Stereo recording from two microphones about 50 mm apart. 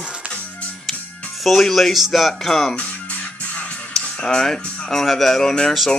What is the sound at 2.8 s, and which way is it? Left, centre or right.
Music, left.